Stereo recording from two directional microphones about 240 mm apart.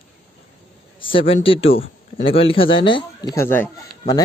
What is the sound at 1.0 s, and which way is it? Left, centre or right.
Speech, left.